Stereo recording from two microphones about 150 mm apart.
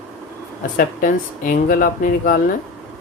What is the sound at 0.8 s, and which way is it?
Speech, 65° left (ahead or behind).